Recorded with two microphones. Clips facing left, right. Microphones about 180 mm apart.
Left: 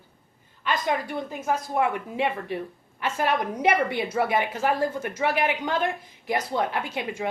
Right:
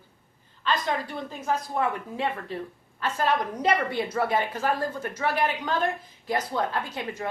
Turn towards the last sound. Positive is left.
turn(degrees=10)  # may be behind; listen again after turning